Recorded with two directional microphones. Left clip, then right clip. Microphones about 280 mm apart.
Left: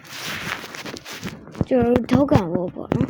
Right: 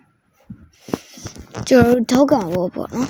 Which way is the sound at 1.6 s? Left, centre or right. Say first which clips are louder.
Right 5 dB; right.